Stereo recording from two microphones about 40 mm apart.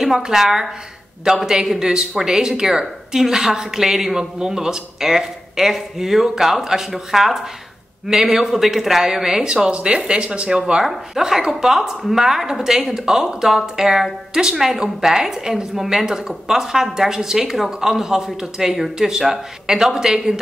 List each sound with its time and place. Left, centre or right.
0.2 s speech: centre
9.5 s speech: right
10.8 s speech: centre